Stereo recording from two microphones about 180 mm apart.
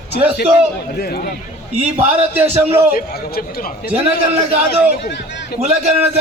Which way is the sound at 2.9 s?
60° left (ahead or behind).